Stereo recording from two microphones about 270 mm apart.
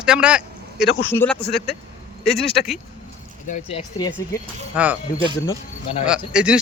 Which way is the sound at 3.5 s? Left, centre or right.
Left.